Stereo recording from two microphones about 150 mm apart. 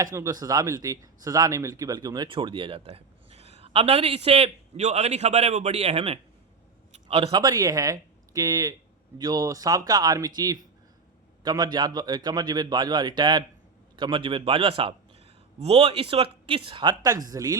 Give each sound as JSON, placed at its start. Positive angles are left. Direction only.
{"t": 0.0, "sound": "a man's voice", "side_deg": -20}
{"t": 7.4, "sound": "a man's voice", "side_deg": -25}